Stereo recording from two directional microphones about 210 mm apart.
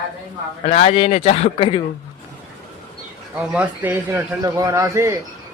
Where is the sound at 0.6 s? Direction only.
30° left (ahead or behind).